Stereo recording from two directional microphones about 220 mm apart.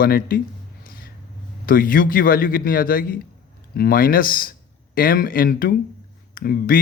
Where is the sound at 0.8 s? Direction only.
40° left (ahead or behind).